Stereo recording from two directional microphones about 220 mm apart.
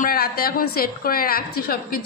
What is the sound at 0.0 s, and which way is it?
A woman's voice, 40° left (ahead or behind).